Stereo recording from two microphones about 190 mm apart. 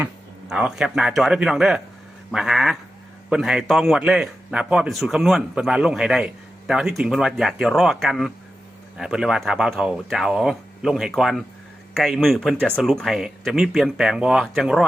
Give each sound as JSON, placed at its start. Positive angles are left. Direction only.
{"t": 0.0, "sound": "a man's voice", "side_deg": -5}